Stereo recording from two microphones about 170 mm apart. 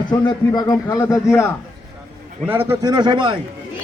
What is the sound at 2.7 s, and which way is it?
Speech, 25° right (ahead or behind).